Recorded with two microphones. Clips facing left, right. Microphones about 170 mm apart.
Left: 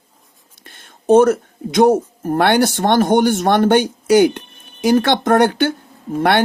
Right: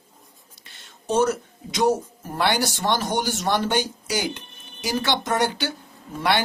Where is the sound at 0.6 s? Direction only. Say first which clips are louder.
Left 15 dB; 55° left (ahead or behind).